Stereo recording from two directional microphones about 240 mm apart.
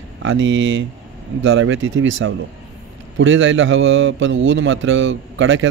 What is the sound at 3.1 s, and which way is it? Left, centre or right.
A man's voice, right.